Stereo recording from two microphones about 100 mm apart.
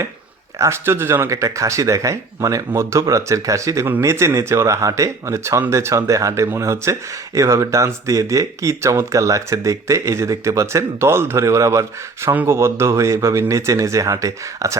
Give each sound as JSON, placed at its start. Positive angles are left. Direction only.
{"t": 0.6, "sound": "speech", "side_deg": -25}
{"t": 12.3, "sound": "speech", "side_deg": -20}